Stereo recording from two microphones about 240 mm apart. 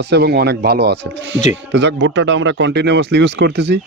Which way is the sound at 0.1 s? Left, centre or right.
Right.